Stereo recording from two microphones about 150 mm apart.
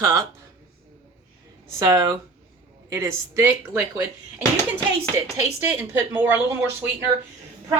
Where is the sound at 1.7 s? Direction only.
20° right (ahead or behind).